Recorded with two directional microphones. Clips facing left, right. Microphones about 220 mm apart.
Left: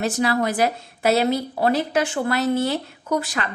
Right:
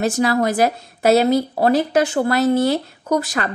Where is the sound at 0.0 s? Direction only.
45° right (ahead or behind).